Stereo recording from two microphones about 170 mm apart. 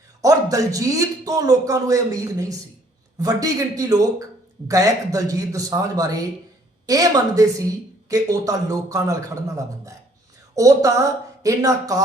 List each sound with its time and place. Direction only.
0.2 s a man's voice: 20° right (ahead or behind)